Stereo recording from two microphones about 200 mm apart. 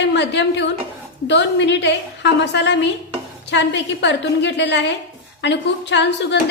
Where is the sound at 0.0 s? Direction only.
60° left (ahead or behind).